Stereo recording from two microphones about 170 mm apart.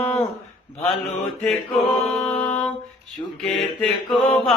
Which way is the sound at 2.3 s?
10° left (ahead or behind).